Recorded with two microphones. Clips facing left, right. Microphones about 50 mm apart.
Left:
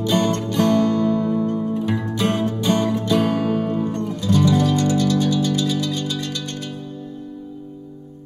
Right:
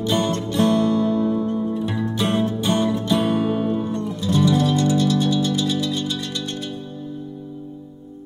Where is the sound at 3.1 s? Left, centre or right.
Left.